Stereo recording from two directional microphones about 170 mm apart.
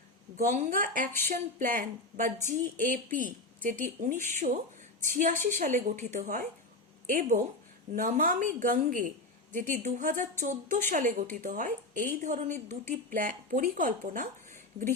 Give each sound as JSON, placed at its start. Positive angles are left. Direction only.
{"t": 0.5, "sound": "a woman's voice", "side_deg": -55}